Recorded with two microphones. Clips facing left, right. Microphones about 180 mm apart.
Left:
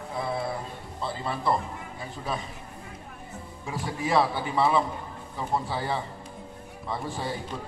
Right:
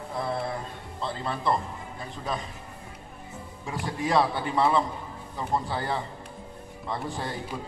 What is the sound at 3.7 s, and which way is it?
A man's voice, centre (ahead or behind).